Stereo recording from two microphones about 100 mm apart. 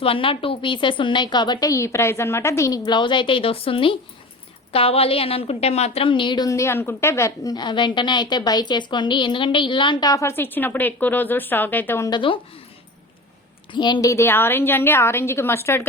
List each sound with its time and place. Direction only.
0.0 s a woman's voice: 65° left (ahead or behind)
4.7 s a woman's voice: 75° left (ahead or behind); by 6.5 s 50° left (ahead or behind)
6.5 s a woman's voice: 30° left (ahead or behind); by 10.1 s 55° left (ahead or behind)
10.1 s a woman's voice: 30° left (ahead or behind)
12.1 s a woman's voice: 55° left (ahead or behind)
13.7 s a woman's voice: 50° left (ahead or behind)
14.0 s a woman's voice: 30° left (ahead or behind)